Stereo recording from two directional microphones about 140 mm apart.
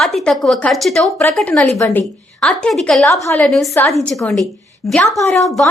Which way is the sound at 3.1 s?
20° left (ahead or behind).